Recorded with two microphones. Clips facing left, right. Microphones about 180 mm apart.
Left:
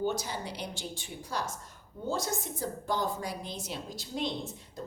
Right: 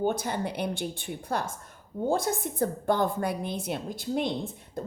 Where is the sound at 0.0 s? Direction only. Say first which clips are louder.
Right 5 dB; 55° right (ahead or behind).